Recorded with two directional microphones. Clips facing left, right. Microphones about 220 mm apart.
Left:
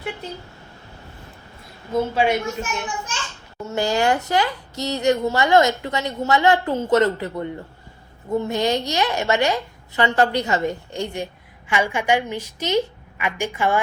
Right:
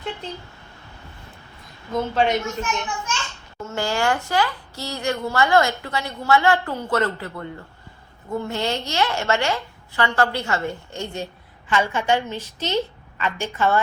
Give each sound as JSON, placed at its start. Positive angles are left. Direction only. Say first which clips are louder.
{"t": 1.9, "sound": "a woman's voice", "louder": "left 1 dB", "side_deg": 10}